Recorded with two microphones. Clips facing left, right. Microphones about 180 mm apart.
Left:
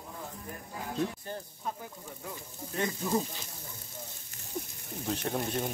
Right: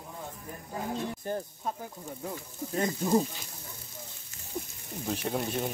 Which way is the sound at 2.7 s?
40° right (ahead or behind).